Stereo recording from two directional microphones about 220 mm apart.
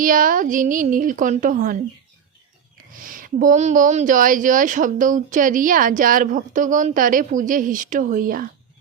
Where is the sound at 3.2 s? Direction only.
40° right (ahead or behind).